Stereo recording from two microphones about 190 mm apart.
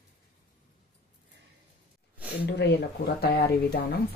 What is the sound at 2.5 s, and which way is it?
Speech, 60° left (ahead or behind).